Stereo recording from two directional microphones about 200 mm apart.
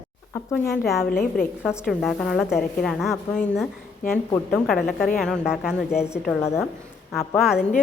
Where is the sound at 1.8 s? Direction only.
Centre (ahead or behind).